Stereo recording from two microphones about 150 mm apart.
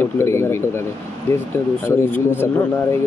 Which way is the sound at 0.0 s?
15° left (ahead or behind).